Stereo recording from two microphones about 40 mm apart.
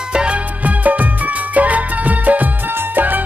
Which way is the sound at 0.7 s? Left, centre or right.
Right.